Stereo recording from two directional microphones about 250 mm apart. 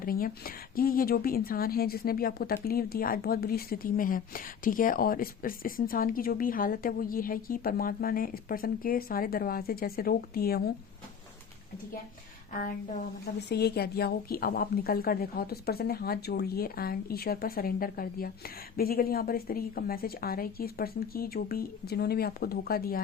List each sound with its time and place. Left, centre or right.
0.0 s speech: left
13.2 s speech: left